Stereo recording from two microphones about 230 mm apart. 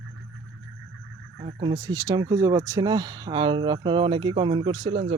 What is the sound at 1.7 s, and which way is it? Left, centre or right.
Speech, centre.